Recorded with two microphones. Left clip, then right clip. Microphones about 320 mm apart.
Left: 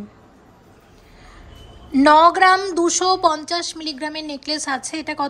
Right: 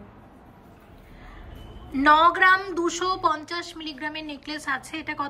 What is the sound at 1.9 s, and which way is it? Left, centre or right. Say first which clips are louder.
A woman's voice: left 5 dB; centre.